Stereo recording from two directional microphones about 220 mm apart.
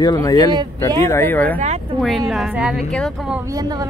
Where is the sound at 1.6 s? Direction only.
30° right (ahead or behind).